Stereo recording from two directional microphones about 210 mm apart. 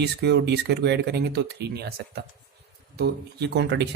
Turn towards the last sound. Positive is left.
turn(degrees=-55)  # may be behind; listen again after turning